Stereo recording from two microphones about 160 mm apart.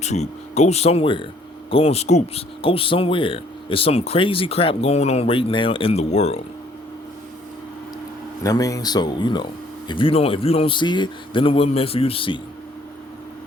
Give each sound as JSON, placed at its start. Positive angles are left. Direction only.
{"t": 0.0, "sound": "speech", "side_deg": 45}
{"t": 8.4, "sound": "speech", "side_deg": 20}